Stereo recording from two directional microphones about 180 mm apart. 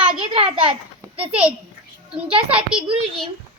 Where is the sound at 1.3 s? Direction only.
5° right (ahead or behind).